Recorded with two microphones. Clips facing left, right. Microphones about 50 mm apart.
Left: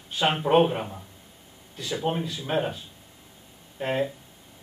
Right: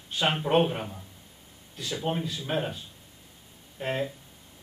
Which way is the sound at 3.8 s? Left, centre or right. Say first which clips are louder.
Left 4 dB; centre.